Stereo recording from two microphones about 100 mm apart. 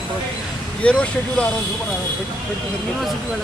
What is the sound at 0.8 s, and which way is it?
Speech, 10° left (ahead or behind).